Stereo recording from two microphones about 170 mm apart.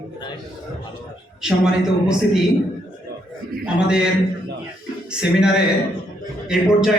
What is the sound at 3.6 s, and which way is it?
Speech, 5° right (ahead or behind).